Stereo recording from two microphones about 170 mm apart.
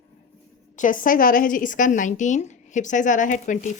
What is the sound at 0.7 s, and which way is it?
A woman's voice, 50° left (ahead or behind).